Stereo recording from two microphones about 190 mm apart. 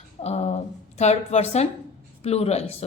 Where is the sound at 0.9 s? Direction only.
35° left (ahead or behind).